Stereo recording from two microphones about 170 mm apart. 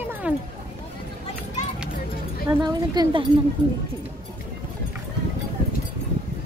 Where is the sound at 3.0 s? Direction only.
25° right (ahead or behind).